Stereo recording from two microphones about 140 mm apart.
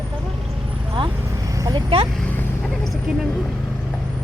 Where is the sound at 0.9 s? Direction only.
30° right (ahead or behind).